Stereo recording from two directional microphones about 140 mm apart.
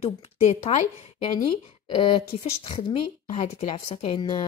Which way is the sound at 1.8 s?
40° left (ahead or behind).